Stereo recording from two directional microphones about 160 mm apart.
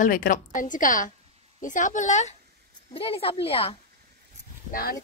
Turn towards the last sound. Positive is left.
turn(degrees=65)  # may be behind; listen again after turning